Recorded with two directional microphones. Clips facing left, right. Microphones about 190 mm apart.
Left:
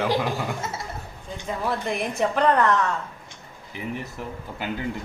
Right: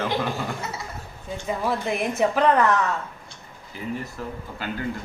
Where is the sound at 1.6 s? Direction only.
Centre (ahead or behind).